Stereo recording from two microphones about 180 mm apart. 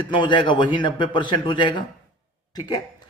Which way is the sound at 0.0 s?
25° left (ahead or behind).